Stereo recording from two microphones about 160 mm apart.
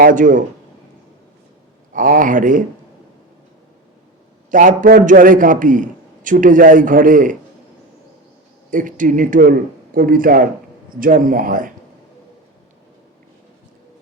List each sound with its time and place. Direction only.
0.0 s a man's voice: 55° right (ahead or behind)
1.9 s a man's voice: 60° right (ahead or behind)
4.5 s a man's voice: 55° right (ahead or behind)
8.7 s a man's voice: 55° right (ahead or behind)